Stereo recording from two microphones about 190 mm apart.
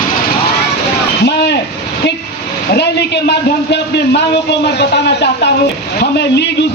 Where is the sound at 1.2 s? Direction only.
60° left (ahead or behind).